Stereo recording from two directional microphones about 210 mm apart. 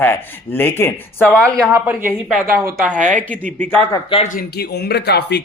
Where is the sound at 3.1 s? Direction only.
5° left (ahead or behind).